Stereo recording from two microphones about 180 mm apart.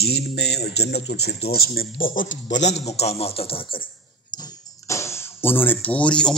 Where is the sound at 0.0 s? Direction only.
60° left (ahead or behind).